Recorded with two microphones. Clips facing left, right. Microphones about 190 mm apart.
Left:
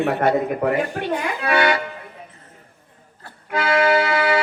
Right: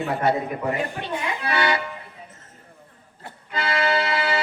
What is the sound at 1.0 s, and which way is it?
Speech, 50° left (ahead or behind).